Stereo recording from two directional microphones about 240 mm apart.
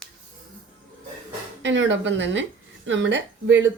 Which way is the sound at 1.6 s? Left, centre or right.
Right.